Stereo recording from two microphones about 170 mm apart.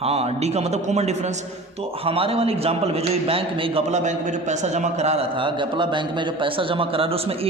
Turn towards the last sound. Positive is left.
turn(degrees=-35)  # may be behind; listen again after turning